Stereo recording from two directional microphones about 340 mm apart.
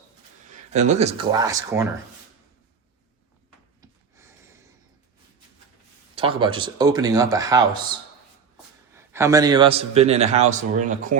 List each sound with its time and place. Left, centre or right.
0.7 s a man's voice: centre
3.8 s a sound: centre
6.1 s a man's voice: centre
9.0 s a man's voice: centre